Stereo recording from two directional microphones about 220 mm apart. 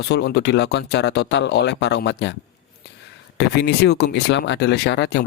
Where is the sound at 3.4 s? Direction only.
50° left (ahead or behind).